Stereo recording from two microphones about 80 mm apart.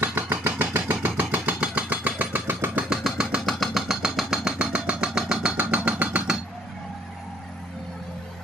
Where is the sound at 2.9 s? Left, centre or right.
Centre.